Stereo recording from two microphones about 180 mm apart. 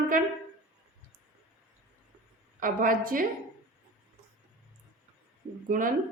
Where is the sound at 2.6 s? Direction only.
50° right (ahead or behind).